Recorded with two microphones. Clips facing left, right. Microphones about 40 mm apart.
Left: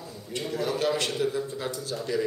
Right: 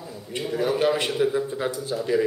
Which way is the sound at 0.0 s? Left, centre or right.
Centre.